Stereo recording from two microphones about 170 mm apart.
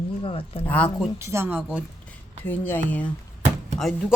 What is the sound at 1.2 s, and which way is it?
Speech, 15° right (ahead or behind).